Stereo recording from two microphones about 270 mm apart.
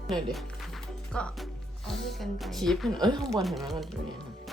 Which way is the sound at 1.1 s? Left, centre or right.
Centre.